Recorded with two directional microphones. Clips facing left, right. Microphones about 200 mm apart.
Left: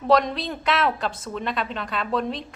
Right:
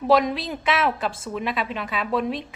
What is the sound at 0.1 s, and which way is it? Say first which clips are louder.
A woman's voice: even; 5° right (ahead or behind).